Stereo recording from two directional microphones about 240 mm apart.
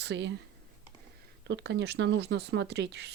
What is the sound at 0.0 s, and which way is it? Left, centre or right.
Speech, right.